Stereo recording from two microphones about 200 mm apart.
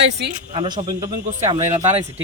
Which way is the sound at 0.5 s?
25° right (ahead or behind).